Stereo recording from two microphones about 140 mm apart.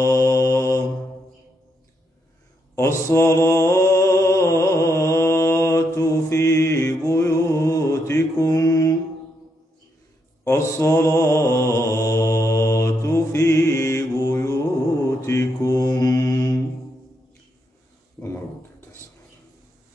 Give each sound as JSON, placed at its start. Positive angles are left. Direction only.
{"t": 0.0, "sound": "mantra", "side_deg": 20}
{"t": 2.7, "sound": "mantra", "side_deg": 20}
{"t": 10.4, "sound": "mantra", "side_deg": 20}